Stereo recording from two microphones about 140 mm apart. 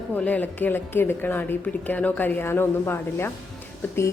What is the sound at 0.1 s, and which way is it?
A woman's voice, 10° left (ahead or behind).